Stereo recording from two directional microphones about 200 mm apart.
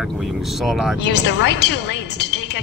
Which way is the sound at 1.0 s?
55° left (ahead or behind).